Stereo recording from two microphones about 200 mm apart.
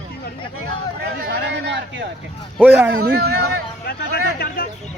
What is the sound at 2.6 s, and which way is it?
Speech, 5° right (ahead or behind).